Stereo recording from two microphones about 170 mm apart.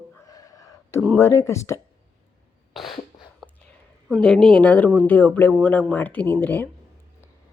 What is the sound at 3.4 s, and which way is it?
Whispering, centre (ahead or behind).